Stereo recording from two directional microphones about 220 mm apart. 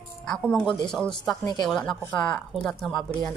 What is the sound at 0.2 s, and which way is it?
Speech, 5° left (ahead or behind).